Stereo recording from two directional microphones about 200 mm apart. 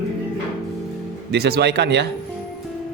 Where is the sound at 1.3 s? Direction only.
55° right (ahead or behind).